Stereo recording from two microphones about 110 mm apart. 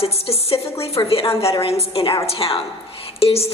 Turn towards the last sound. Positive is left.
turn(degrees=65)  # may be behind; listen again after turning